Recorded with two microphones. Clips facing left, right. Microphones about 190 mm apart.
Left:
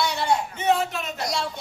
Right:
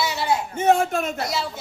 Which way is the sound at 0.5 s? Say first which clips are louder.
Right 4 dB; 50° right (ahead or behind).